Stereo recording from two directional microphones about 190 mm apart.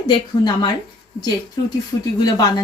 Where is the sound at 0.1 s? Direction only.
20° left (ahead or behind).